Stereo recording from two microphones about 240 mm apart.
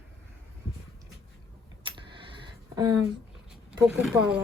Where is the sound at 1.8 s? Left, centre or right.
Right.